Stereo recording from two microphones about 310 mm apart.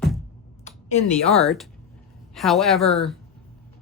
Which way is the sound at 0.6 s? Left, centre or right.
Left.